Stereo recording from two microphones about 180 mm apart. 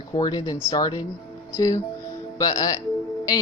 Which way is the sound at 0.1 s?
20° left (ahead or behind).